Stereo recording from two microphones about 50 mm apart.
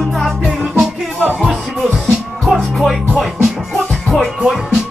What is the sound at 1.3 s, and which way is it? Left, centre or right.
Music, centre.